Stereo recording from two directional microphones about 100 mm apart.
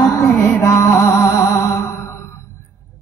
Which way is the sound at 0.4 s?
30° left (ahead or behind).